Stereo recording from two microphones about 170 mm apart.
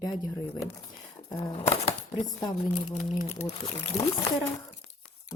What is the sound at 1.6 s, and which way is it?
Speech, 35° left (ahead or behind).